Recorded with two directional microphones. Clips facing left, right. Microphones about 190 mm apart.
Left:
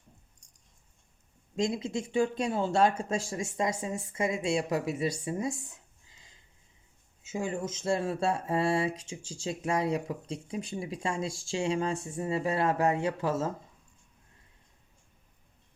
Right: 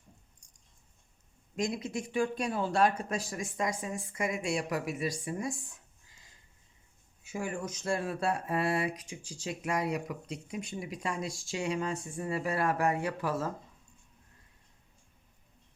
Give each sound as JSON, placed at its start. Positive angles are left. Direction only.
{"t": 1.5, "sound": "speech", "side_deg": 25}